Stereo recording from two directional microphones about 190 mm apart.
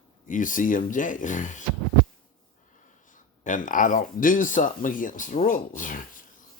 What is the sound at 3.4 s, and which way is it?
Speech, 45° left (ahead or behind).